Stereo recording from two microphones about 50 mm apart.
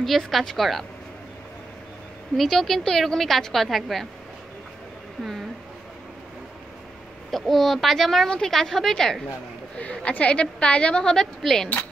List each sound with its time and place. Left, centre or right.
0.3 s a woman's voice: centre
2.3 s a woman's voice: centre
7.2 s a woman's voice: centre
9.8 s a woman's voice: left; by 11.7 s centre